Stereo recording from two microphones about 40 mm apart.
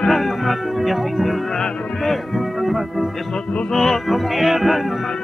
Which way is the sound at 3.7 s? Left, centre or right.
Centre.